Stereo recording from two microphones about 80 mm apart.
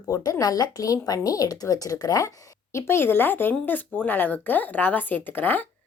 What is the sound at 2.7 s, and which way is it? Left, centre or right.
Speech, left.